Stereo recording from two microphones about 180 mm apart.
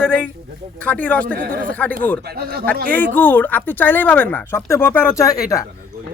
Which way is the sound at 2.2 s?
60° right (ahead or behind).